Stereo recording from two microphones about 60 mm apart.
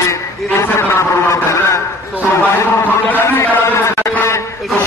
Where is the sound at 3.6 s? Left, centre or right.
Left.